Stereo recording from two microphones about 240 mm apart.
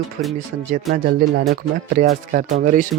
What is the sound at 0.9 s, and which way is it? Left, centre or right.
Speech, centre.